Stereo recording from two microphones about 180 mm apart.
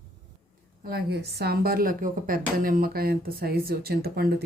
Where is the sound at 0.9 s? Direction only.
60° right (ahead or behind).